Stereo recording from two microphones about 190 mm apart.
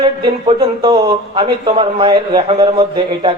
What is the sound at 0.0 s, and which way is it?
Speech, 30° right (ahead or behind).